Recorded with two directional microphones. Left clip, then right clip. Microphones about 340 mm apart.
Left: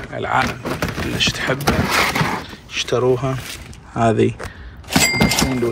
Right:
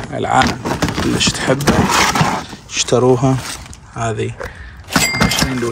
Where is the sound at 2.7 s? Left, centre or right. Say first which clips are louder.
Right 4 dB; centre.